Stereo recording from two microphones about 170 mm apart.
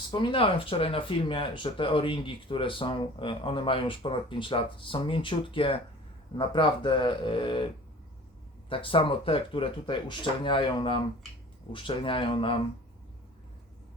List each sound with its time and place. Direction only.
0.1 s speech: 30° left (ahead or behind)
8.7 s speech: 30° left (ahead or behind)